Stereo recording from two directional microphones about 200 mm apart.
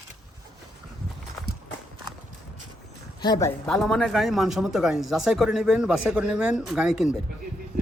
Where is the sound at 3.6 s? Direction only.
5° left (ahead or behind).